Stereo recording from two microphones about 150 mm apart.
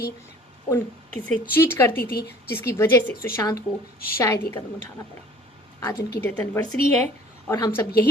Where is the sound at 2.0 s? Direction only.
90° left.